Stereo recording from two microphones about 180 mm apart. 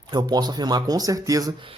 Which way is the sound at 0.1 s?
20° right (ahead or behind).